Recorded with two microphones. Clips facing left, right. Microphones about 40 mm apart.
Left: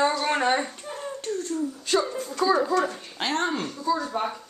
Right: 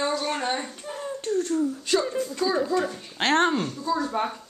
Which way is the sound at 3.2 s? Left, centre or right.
Right.